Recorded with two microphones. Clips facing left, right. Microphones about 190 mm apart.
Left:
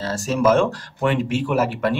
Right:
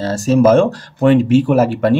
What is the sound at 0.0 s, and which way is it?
Speech, 40° right (ahead or behind).